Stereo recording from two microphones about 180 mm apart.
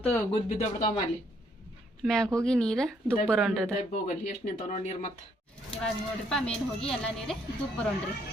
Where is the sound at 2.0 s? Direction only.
5° left (ahead or behind).